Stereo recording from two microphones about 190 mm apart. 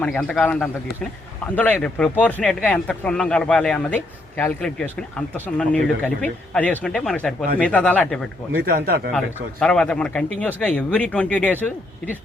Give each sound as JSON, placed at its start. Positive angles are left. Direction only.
{"t": 0.0, "sound": "speech", "side_deg": 5}
{"t": 8.6, "sound": "speech", "side_deg": -50}
{"t": 9.1, "sound": "speech", "side_deg": 5}